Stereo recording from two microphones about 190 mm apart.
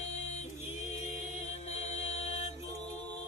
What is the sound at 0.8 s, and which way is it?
Mantra, 35° left (ahead or behind).